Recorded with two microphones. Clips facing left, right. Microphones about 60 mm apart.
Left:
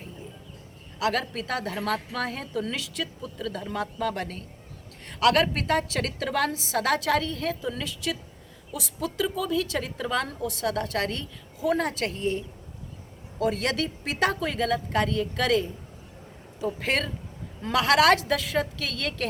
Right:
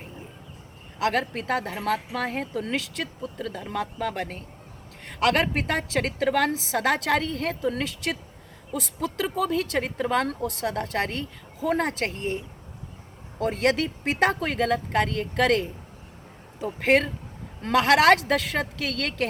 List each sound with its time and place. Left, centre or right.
0.9 s a woman's voice: right
2.8 s speech: right
5.0 s a woman's voice: right
10.8 s a woman's voice: right
13.4 s speech: right
16.6 s a woman's voice: right
18.2 s speech: right